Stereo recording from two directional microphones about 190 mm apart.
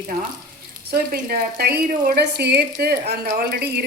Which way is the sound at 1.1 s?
50° right (ahead or behind).